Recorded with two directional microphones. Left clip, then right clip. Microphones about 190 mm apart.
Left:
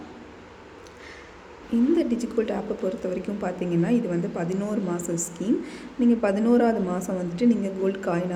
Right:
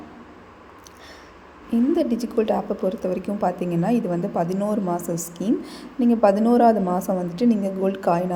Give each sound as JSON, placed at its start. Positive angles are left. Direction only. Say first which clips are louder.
{"t": 2.0, "sound": "speech", "louder": "right 3 dB", "side_deg": -20}